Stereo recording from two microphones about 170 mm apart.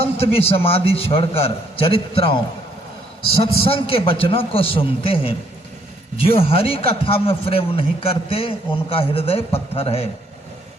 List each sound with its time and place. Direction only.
0.0 s a man's voice: 35° left (ahead or behind)
3.3 s a man's voice: 35° left (ahead or behind)